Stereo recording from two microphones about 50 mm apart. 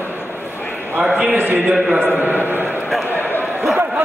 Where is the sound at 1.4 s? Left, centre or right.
Right.